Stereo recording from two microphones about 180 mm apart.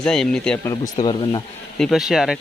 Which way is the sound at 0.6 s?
20° left (ahead or behind).